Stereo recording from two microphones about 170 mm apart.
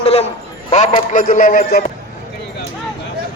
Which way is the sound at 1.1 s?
55° left (ahead or behind).